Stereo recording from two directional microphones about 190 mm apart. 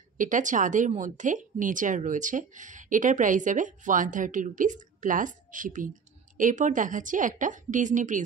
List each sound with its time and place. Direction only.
0.2 s a woman's voice: 40° right (ahead or behind)